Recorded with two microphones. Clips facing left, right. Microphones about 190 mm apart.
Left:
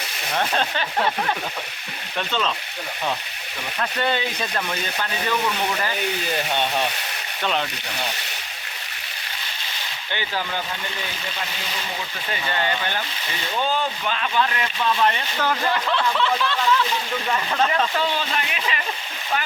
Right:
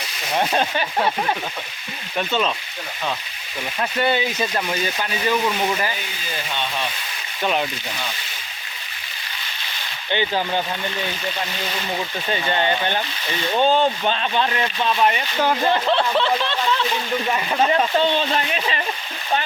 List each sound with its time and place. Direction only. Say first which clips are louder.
0.3 s speech: right 3 dB; 15° right (ahead or behind)
3.8 s speech: right 3 dB; 10° right (ahead or behind)
6.3 s speech: left 1 dB; 60° left (ahead or behind)
7.4 s speech: right 3 dB; 10° right (ahead or behind)
10.1 s speech: right 6 dB; 20° right (ahead or behind)
12.3 s speech: right 4 dB; 25° right (ahead or behind)
17.2 s speech: right 1 dB; 15° right (ahead or behind)
17.7 s speech: right 4 dB; 25° right (ahead or behind)